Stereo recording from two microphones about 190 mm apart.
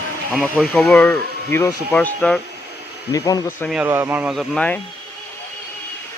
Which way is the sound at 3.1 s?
20° left (ahead or behind).